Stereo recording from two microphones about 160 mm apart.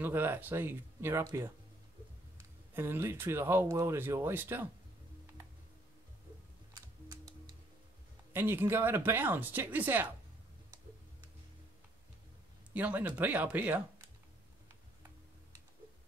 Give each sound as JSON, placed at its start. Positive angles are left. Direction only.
{"t": 0.0, "sound": "speech", "side_deg": -15}
{"t": 2.7, "sound": "speech", "side_deg": -15}
{"t": 8.3, "sound": "speech", "side_deg": -15}
{"t": 12.7, "sound": "speech", "side_deg": -10}